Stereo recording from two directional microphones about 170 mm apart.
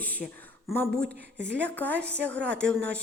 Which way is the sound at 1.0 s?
70° right (ahead or behind).